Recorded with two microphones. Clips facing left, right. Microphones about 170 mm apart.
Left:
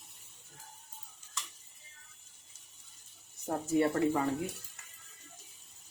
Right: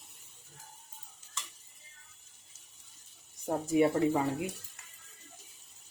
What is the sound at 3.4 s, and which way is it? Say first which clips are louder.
Speech: right 2 dB; 10° right (ahead or behind).